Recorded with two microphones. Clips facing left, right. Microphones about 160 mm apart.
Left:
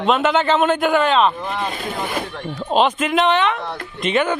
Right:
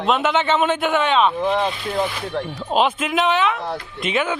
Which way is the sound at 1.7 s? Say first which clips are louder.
Right 1 dB; 50° left (ahead or behind).